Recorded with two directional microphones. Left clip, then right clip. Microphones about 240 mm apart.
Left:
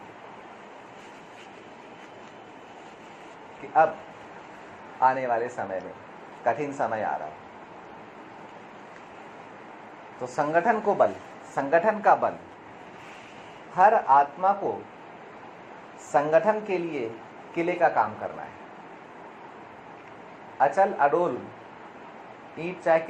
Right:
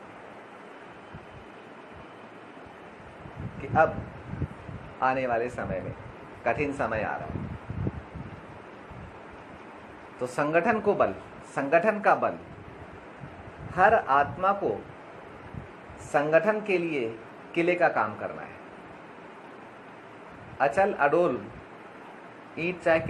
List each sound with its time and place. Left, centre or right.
4.9 s a man's voice: right
10.2 s a man's voice: right
13.7 s a man's voice: right
16.1 s a woman's voice: right
20.6 s a man's voice: right
22.5 s a man's voice: right